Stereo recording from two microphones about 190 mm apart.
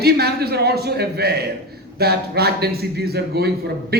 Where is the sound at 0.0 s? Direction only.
55° right (ahead or behind).